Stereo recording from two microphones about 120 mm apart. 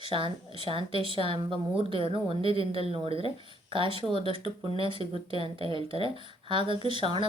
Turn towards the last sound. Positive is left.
turn(degrees=-45)  # may be behind; listen again after turning